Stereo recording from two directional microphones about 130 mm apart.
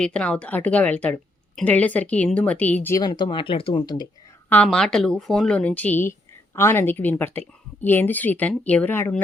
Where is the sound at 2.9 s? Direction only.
35° left (ahead or behind).